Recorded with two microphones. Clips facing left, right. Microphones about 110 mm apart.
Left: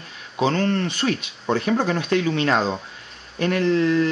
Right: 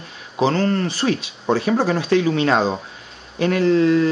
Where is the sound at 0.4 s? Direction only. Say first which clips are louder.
Right 2 dB; 30° right (ahead or behind).